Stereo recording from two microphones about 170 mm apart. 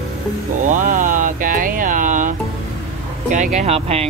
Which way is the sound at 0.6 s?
50° right (ahead or behind).